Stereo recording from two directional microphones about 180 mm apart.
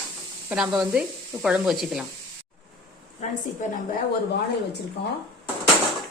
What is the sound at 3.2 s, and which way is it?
Speech, 40° left (ahead or behind).